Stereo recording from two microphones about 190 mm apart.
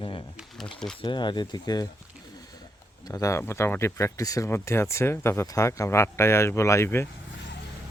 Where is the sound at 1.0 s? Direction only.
25° left (ahead or behind).